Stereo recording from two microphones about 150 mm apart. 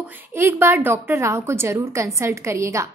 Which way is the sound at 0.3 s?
15° right (ahead or behind).